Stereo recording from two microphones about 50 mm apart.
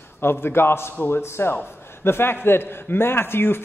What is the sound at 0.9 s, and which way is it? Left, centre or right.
Speech, left.